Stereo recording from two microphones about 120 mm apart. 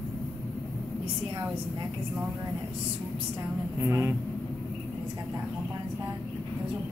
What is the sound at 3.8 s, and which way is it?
Speech, 20° right (ahead or behind).